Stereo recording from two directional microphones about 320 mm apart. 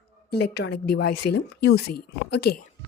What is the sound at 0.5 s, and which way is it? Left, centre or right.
Speech, left.